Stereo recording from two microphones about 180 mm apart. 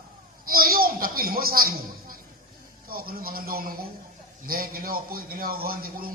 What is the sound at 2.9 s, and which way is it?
A man's voice, 55° right (ahead or behind).